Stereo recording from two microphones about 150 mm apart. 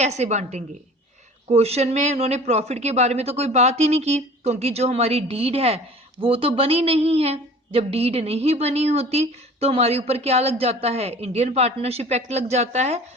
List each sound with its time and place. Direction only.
0.0 s speech: 50° right (ahead or behind)